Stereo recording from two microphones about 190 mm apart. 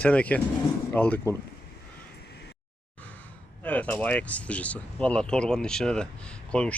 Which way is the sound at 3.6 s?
10° left (ahead or behind).